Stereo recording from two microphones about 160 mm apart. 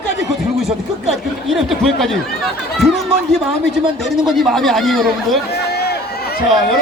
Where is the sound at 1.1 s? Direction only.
Centre (ahead or behind).